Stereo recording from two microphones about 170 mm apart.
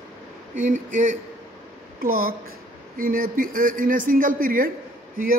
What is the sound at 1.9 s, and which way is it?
A man's voice, 60° right (ahead or behind).